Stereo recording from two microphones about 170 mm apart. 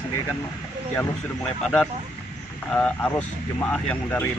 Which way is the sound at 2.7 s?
10° left (ahead or behind).